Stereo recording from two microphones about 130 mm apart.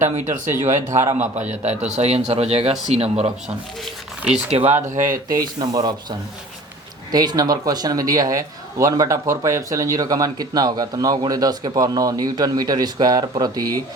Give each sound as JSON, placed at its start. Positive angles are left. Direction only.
{"t": 0.0, "sound": "a man's voice", "side_deg": -75}
{"t": 4.2, "sound": "speech", "side_deg": -5}
{"t": 4.5, "sound": "a man's voice", "side_deg": -60}
{"t": 5.1, "sound": "a man's voice", "side_deg": -30}